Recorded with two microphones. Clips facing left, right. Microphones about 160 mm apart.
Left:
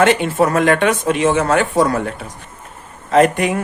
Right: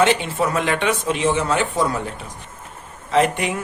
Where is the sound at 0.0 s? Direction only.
55° left (ahead or behind); by 2.1 s 70° left (ahead or behind).